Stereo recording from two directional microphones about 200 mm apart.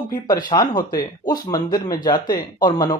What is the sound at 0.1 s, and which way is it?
Speech, 20° left (ahead or behind).